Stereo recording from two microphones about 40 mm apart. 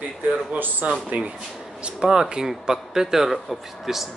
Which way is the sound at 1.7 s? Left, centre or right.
Right.